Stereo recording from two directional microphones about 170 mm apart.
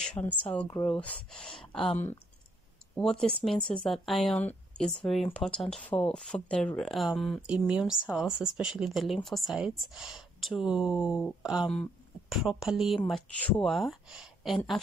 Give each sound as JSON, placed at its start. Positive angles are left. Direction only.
{"t": 0.2, "sound": "speech", "side_deg": 35}
{"t": 0.8, "sound": "speech", "side_deg": 5}
{"t": 1.5, "sound": "speech", "side_deg": 30}
{"t": 3.0, "sound": "speech", "side_deg": 0}